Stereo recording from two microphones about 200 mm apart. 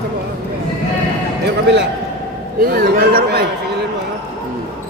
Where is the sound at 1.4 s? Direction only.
60° right (ahead or behind).